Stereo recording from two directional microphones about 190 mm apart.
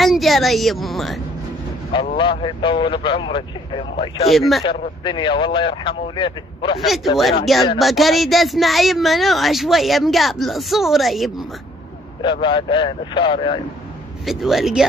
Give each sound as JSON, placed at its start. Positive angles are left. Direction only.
{"t": 0.0, "sound": "speech", "side_deg": 0}
{"t": 2.1, "sound": "speech", "side_deg": 25}
{"t": 4.3, "sound": "speech", "side_deg": 0}
{"t": 4.6, "sound": "speech", "side_deg": 30}
{"t": 6.8, "sound": "speech", "side_deg": 0}
{"t": 12.2, "sound": "speech", "side_deg": 25}
{"t": 14.2, "sound": "speech", "side_deg": 0}